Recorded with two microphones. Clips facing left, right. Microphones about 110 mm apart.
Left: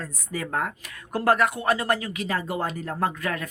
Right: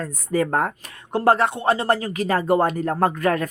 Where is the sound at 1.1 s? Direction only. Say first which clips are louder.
Right 4 dB; 25° right (ahead or behind).